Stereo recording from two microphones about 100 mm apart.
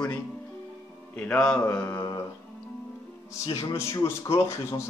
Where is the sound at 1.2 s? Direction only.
10° left (ahead or behind).